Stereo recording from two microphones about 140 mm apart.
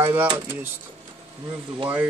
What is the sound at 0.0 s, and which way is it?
Speech, 15° right (ahead or behind).